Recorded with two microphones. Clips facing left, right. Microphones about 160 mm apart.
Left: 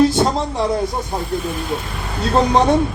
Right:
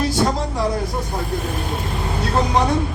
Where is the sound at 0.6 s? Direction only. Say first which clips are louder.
Left 3 dB; 25° left (ahead or behind).